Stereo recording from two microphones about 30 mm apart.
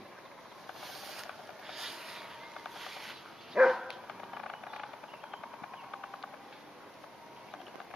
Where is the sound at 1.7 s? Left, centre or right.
Centre.